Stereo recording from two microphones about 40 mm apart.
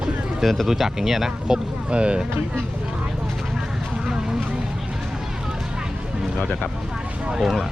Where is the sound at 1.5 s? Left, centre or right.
Right.